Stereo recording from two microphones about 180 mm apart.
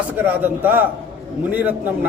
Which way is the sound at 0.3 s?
10° right (ahead or behind).